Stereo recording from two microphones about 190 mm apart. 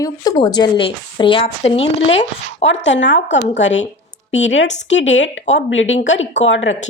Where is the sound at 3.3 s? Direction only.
40° left (ahead or behind).